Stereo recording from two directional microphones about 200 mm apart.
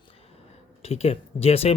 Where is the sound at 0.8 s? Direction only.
30° left (ahead or behind).